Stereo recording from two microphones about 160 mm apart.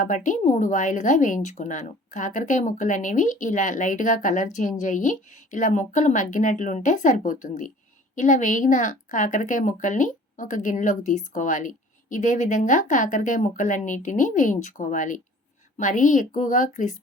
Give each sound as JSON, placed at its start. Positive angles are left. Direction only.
{"t": 0.0, "sound": "speech", "side_deg": 50}